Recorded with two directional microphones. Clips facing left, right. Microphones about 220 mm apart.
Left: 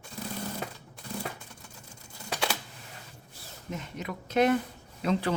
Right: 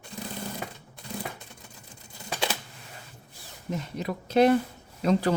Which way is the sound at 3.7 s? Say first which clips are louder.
Right 5 dB; 35° right (ahead or behind).